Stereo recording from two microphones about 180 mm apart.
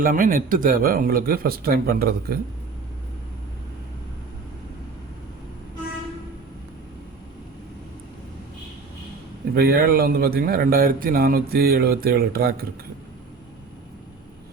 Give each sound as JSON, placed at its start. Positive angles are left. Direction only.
{"t": 0.0, "sound": "a man's voice", "side_deg": -50}
{"t": 9.6, "sound": "a man's voice", "side_deg": -60}